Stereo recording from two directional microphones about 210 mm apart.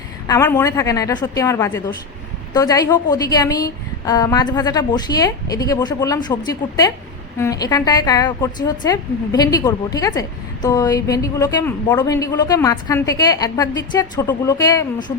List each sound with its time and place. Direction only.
0.3 s a woman's voice: 15° left (ahead or behind)